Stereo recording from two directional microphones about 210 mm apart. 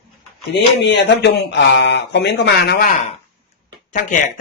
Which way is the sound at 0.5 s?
55° left (ahead or behind).